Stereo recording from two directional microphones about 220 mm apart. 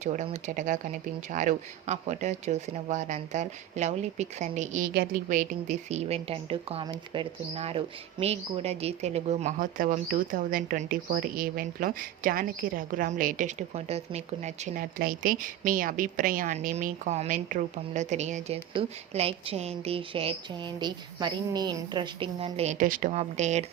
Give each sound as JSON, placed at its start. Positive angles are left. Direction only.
{"t": 0.0, "sound": "speech", "side_deg": -35}